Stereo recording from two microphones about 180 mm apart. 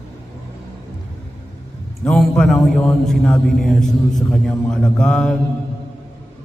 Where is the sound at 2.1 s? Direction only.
5° left (ahead or behind).